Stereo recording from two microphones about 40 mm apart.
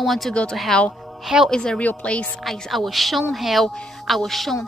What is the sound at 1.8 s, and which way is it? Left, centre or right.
Speech, left.